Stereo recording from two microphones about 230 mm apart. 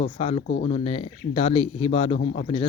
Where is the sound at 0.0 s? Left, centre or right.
Left.